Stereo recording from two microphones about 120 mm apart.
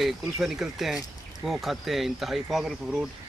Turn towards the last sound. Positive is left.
turn(degrees=-5)  # may be behind; listen again after turning